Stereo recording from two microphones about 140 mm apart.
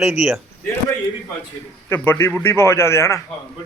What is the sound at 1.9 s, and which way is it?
A man's voice, 15° left (ahead or behind).